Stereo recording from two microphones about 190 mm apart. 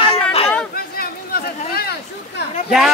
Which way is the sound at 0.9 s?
55° left (ahead or behind).